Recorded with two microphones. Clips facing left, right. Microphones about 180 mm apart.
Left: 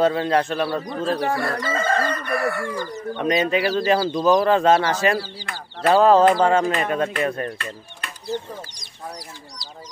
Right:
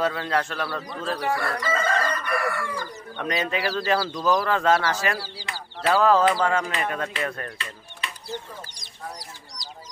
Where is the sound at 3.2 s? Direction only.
20° left (ahead or behind).